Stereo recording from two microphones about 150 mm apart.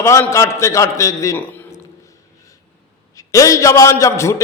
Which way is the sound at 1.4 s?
10° left (ahead or behind).